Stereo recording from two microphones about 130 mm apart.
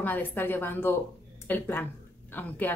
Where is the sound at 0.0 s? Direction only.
15° left (ahead or behind).